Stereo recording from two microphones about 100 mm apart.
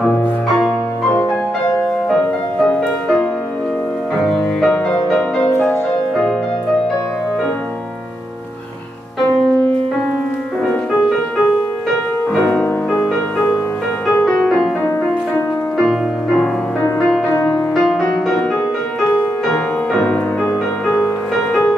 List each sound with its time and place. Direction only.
0.0 s music: 5° left (ahead or behind)
2.0 s music: 10° left (ahead or behind)
5.5 s music: 25° left (ahead or behind)
12.4 s music: 20° left (ahead or behind)
14.2 s music: centre (ahead or behind)
15.8 s music: 5° left (ahead or behind)
17.5 s music: 10° left (ahead or behind)